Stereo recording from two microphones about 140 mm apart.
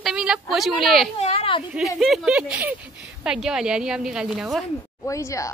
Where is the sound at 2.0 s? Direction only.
Centre (ahead or behind).